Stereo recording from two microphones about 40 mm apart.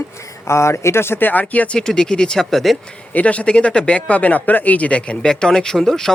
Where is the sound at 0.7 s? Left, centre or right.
Left.